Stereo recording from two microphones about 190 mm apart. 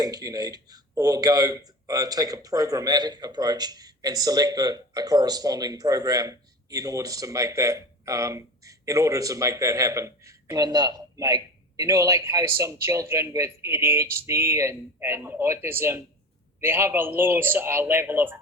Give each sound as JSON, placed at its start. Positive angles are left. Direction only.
{"t": 0.0, "sound": "speech", "side_deg": -20}